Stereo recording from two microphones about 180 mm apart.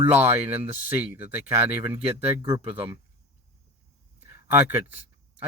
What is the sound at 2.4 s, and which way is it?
Speech, 30° right (ahead or behind).